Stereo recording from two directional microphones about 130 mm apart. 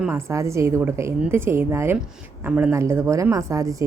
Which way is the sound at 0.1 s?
20° right (ahead or behind).